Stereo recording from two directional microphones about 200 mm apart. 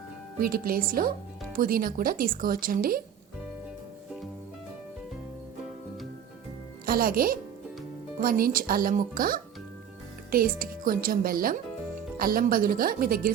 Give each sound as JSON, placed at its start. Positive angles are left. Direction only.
{"t": 0.3, "sound": "speech", "side_deg": -45}
{"t": 6.8, "sound": "a child's voice", "side_deg": -45}